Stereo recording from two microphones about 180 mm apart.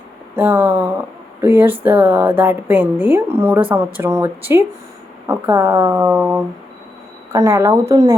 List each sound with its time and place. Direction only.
0.3 s a woman's voice: 10° right (ahead or behind)